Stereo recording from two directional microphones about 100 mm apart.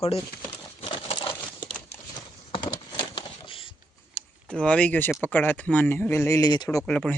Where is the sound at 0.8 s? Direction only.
60° left (ahead or behind).